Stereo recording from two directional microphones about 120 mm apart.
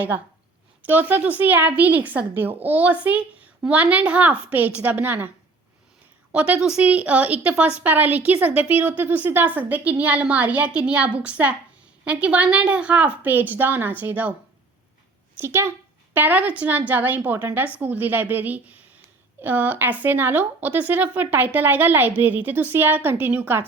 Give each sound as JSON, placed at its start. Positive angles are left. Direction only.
{"t": 0.8, "sound": "a woman's voice", "side_deg": -15}
{"t": 6.3, "sound": "a woman's voice", "side_deg": -10}
{"t": 15.4, "sound": "a woman's voice", "side_deg": -20}